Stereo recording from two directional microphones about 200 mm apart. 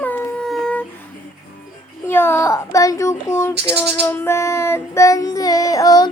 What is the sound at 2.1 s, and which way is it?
Child singing, 10° left (ahead or behind).